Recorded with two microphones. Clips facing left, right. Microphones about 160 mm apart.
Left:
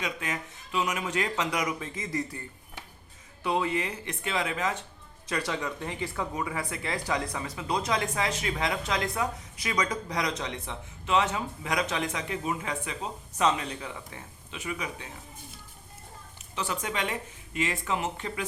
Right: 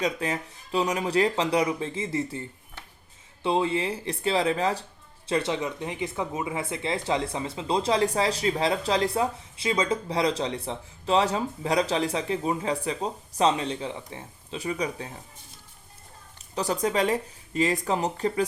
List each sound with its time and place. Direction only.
0.0 s speech: 35° right (ahead or behind)
3.4 s speech: 25° right (ahead or behind)
16.6 s speech: 40° right (ahead or behind)